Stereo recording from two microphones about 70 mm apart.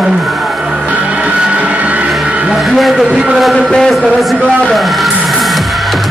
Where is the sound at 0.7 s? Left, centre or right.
Centre.